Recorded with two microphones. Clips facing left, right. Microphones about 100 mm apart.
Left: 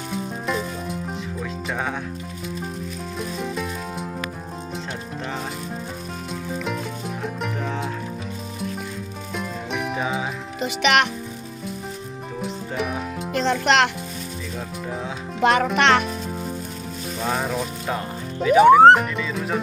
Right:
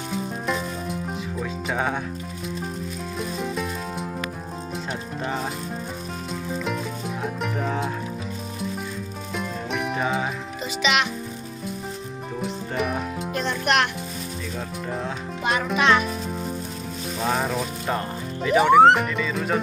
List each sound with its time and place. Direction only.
0.1 s music: centre (ahead or behind)
3.2 s music: centre (ahead or behind)
6.3 s music: centre (ahead or behind)
9.3 s music: centre (ahead or behind)
10.8 s music: 60° left (ahead or behind)
12.4 s music: centre (ahead or behind)
13.3 s music: 90° left
15.4 s music: 75° left (ahead or behind)
16.0 s music: centre (ahead or behind)